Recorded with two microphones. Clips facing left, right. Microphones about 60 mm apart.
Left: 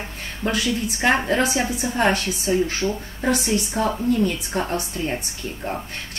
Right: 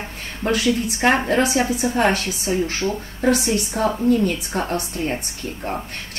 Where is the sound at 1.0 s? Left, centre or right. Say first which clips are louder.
Right 2 dB; right.